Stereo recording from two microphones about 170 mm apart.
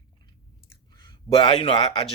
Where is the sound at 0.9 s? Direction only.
30° left (ahead or behind).